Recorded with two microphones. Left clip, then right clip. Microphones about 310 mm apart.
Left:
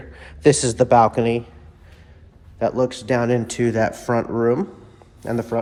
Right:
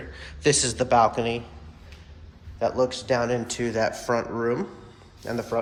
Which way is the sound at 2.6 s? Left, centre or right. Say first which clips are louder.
Left 3 dB; left.